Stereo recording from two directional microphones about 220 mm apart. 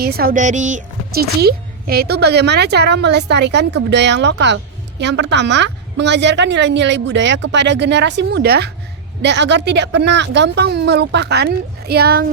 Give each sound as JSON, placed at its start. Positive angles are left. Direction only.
{"t": 0.0, "sound": "a woman's voice", "side_deg": -45}